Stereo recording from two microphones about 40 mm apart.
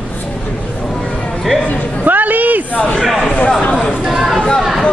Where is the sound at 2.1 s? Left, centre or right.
Right.